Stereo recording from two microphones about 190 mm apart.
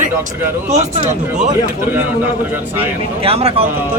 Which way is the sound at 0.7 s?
35° right (ahead or behind).